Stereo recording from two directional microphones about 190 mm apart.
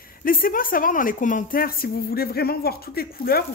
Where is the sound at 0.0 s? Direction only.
50° left (ahead or behind).